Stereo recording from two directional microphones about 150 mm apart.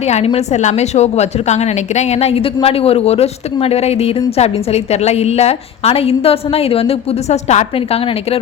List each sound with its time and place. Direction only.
0.1 s a woman's voice: 45° left (ahead or behind)